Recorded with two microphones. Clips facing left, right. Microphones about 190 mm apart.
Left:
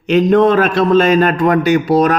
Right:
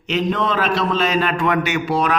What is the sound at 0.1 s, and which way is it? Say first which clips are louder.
A man's voice: left 10 dB; 50° left (ahead or behind).